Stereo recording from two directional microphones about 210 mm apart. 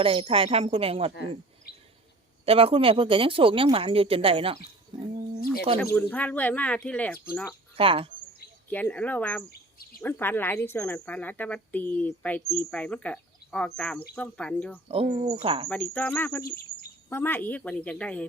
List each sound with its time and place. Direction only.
0.0 s speech: 25° right (ahead or behind)
2.5 s speech: 25° right (ahead or behind)
5.8 s speech: 10° left (ahead or behind)
7.8 s speech: 25° right (ahead or behind)
8.7 s speech: 5° left (ahead or behind)
14.8 s speech: 30° right (ahead or behind)
15.7 s speech: 5° left (ahead or behind)